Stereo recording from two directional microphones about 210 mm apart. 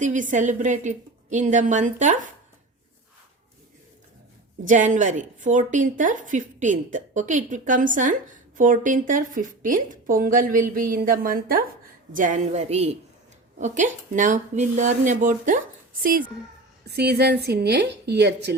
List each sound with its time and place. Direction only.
0.0 s a woman's voice: 35° right (ahead or behind)
4.6 s a woman's voice: 35° right (ahead or behind); by 18.5 s 55° right (ahead or behind)